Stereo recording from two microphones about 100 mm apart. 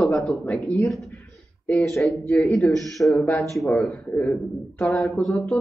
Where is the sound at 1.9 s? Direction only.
30° left (ahead or behind).